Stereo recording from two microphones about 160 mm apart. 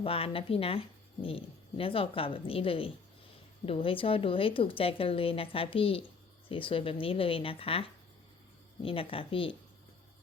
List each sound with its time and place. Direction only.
0.0 s speech: 35° left (ahead or behind)